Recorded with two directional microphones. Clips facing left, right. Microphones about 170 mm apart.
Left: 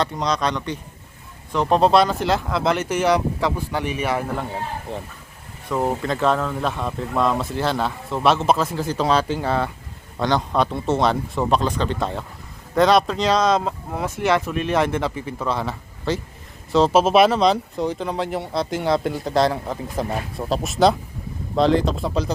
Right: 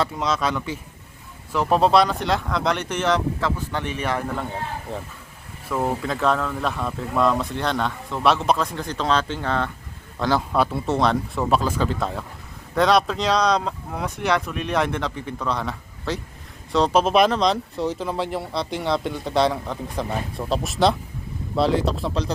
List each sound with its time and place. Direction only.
0.0 s speech: 5° right (ahead or behind)
4.9 s speech: 30° left (ahead or behind)
5.8 s speech: centre (ahead or behind)
10.2 s speech: 5° right (ahead or behind)